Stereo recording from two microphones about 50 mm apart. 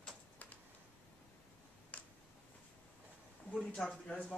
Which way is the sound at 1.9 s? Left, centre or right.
Left.